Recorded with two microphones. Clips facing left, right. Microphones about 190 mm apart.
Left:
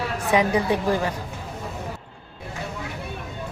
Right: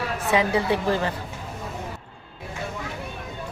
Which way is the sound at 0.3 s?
15° left (ahead or behind).